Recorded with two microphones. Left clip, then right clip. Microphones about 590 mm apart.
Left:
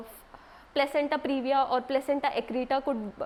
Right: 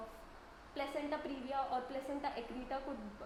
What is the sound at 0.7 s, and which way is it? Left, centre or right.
A woman's voice, left.